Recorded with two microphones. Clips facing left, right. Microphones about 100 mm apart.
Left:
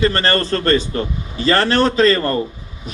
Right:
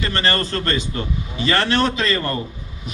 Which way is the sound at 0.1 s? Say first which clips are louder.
Left 4 dB; 40° left (ahead or behind).